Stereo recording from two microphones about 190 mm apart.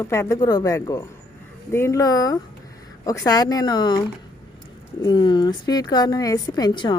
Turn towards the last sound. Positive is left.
turn(degrees=25)  # may be behind; listen again after turning